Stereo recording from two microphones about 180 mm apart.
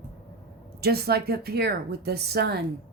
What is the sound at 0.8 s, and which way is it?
A woman's voice, 60° right (ahead or behind).